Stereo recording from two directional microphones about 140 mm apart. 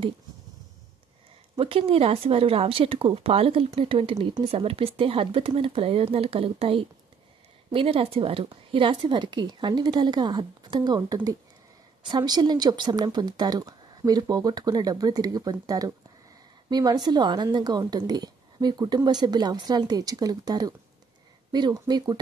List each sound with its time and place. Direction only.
1.6 s speech: 40° right (ahead or behind)